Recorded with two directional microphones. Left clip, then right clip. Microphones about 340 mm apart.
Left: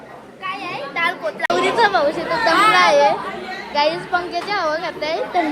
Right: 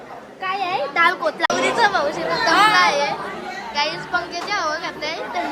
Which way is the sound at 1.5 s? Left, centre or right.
Centre.